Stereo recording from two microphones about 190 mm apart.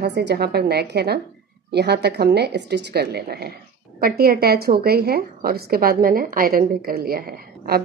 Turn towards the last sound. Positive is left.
turn(degrees=-55)  # may be behind; listen again after turning